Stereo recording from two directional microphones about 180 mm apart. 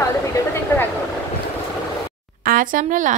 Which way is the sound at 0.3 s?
15° left (ahead or behind).